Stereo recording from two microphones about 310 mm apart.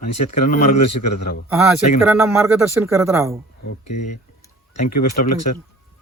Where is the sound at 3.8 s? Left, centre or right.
Left.